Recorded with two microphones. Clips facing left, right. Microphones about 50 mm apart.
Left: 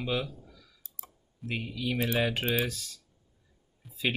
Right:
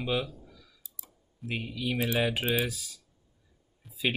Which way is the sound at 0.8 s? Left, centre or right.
Left.